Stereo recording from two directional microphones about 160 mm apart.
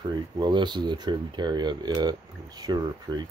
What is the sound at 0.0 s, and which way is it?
Speech, 25° right (ahead or behind).